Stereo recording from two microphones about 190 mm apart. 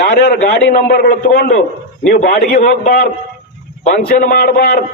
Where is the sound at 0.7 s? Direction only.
50° left (ahead or behind).